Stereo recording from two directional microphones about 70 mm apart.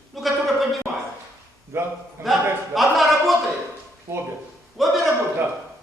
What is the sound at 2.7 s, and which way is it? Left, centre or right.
Speech, centre.